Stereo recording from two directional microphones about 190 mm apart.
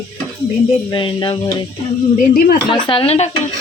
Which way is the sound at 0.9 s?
25° left (ahead or behind).